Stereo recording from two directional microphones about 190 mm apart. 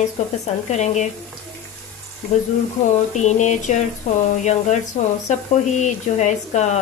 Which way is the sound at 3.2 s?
40° left (ahead or behind).